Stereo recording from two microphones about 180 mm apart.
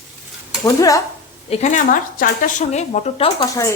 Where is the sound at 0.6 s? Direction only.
20° left (ahead or behind).